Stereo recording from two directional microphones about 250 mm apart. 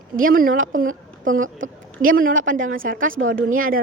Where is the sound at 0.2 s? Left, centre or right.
Right.